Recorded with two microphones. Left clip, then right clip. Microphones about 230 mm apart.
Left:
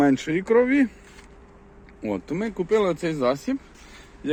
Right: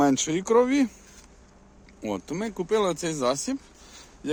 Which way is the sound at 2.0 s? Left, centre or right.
Centre.